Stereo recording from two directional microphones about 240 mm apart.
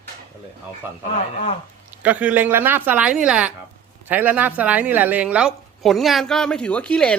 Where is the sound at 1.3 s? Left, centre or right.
Left.